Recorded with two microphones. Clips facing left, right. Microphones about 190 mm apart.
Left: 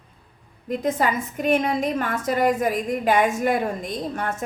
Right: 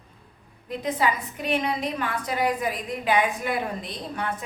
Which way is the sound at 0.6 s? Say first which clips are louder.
Left 3 dB; 45° left (ahead or behind).